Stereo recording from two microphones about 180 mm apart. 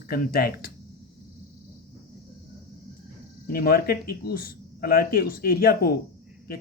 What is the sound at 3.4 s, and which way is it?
Speech, 55° left (ahead or behind).